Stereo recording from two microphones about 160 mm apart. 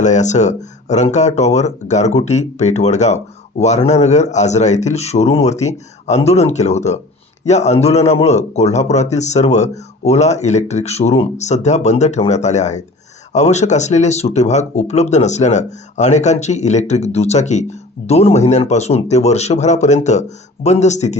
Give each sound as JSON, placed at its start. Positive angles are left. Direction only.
{"t": 0.0, "sound": "speech", "side_deg": 50}